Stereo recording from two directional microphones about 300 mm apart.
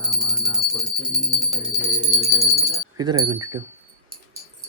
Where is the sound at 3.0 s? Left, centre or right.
Centre.